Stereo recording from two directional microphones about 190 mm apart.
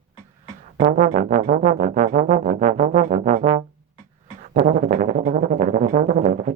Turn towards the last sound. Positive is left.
turn(degrees=-40)  # may be behind; listen again after turning